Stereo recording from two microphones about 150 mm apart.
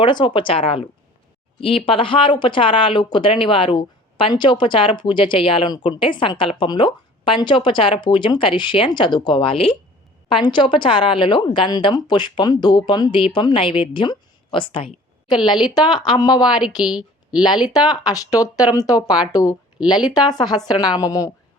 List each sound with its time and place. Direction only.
0.0 s speech: 30° left (ahead or behind)
16.8 s a woman's voice: 5° right (ahead or behind)
17.7 s speech: 25° left (ahead or behind)